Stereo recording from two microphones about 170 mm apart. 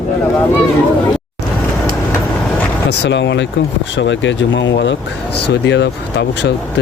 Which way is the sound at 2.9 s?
90° left.